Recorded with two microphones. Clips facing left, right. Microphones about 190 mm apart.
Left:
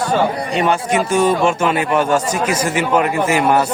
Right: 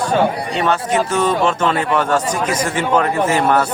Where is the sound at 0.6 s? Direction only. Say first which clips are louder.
Even; 10° left (ahead or behind).